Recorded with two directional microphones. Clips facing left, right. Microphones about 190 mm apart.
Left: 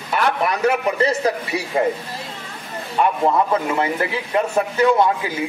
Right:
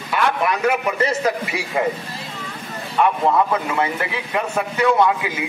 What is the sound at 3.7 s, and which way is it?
A man's voice, 30° left (ahead or behind).